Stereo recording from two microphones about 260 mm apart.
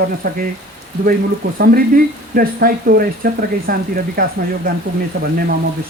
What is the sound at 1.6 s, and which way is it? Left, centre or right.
Speech, right.